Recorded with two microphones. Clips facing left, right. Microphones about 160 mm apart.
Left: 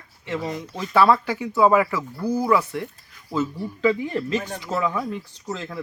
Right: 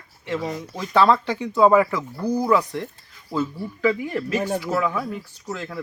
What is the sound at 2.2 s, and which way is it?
Speech, 15° right (ahead or behind).